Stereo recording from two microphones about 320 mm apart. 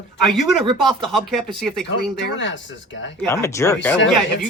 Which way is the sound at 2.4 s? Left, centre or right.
Left.